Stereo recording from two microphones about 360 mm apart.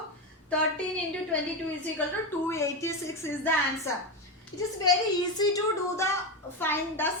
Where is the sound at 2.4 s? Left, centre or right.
Centre.